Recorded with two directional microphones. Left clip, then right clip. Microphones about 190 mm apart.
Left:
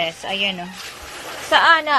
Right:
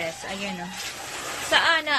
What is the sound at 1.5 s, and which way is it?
Speech, 20° left (ahead or behind).